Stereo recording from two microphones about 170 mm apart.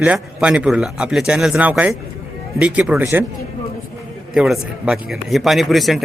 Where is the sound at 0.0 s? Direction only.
5° right (ahead or behind).